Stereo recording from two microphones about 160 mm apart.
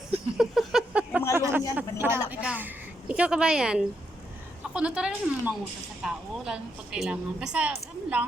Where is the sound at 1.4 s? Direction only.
15° right (ahead or behind).